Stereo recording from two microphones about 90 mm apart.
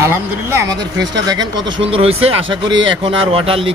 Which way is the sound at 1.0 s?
45° right (ahead or behind).